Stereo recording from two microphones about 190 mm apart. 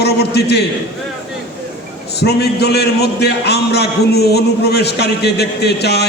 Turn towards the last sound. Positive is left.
turn(degrees=60)  # may be behind; listen again after turning